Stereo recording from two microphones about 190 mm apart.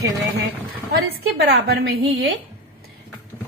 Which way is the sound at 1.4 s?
60° right (ahead or behind).